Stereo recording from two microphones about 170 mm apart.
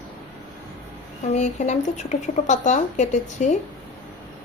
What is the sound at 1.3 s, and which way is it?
Speech, 45° left (ahead or behind).